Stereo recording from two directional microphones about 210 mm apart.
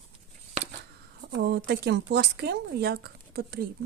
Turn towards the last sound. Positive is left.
turn(degrees=-50)  # may be behind; listen again after turning